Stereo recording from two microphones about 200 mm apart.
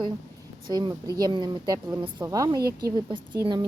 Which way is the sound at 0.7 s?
20° right (ahead or behind).